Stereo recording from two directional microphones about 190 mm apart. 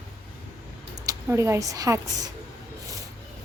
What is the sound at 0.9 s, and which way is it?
Speech, 15° right (ahead or behind).